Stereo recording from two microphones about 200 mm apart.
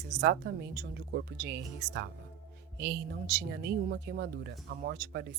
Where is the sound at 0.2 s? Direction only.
60° right (ahead or behind).